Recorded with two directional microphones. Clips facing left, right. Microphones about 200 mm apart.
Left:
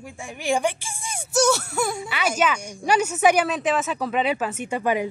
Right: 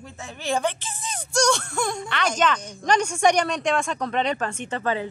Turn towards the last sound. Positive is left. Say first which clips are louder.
# left 3 dB
turn(degrees=15)  # may be behind; listen again after turning